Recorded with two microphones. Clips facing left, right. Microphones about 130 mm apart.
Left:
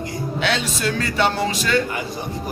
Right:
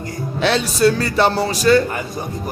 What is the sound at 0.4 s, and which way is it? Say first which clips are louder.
Speech: right 9 dB; 35° right (ahead or behind).